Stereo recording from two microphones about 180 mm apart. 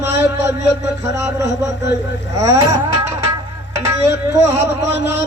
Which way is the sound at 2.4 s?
15° right (ahead or behind).